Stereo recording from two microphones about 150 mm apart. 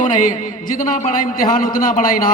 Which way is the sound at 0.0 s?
65° left (ahead or behind).